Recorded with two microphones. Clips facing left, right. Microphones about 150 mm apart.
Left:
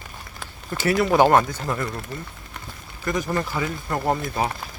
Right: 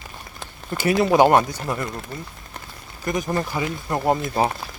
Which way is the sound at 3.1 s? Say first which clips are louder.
Right 1 dB; 20° right (ahead or behind).